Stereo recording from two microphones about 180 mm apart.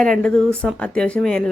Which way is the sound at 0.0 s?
5° left (ahead or behind).